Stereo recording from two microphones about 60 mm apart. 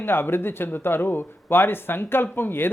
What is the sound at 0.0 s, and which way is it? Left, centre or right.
Speech, left.